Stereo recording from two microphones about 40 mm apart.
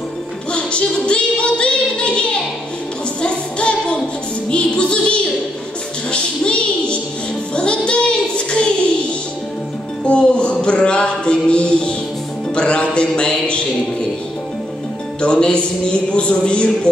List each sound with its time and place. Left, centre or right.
0.5 s music: left
7.5 s female singing: left
10.0 s a sound: left
12.5 s mantra: left
15.1 s mantra: left